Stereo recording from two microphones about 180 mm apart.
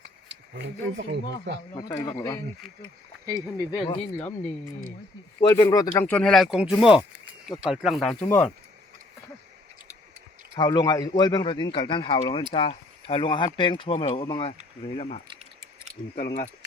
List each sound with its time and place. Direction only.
0.3 s speech: 75° right (ahead or behind)
1.7 s speech: 20° left (ahead or behind)
3.7 s speech: 25° left (ahead or behind)
4.2 s speech: 10° left (ahead or behind)
5.4 s speech: 20° left (ahead or behind)
6.1 s speech: 5° left (ahead or behind)
10.6 s speech: 20° left (ahead or behind)
14.9 s speech: 40° left (ahead or behind)
16.1 s speech: 50° left (ahead or behind)